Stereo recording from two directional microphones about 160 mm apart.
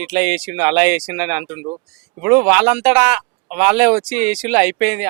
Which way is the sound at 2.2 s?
10° right (ahead or behind).